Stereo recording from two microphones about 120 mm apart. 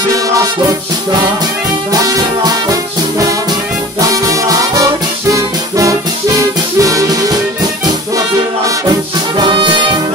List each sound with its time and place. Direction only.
0.1 s music: 30° right (ahead or behind)